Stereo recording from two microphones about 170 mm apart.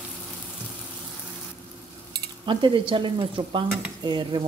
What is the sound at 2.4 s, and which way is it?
Speech, 30° right (ahead or behind).